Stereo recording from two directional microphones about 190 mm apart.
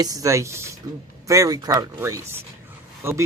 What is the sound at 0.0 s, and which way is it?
Speech, 20° right (ahead or behind).